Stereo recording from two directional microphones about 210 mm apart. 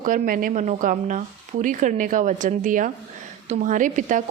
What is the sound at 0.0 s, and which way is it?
A woman's voice, 40° right (ahead or behind).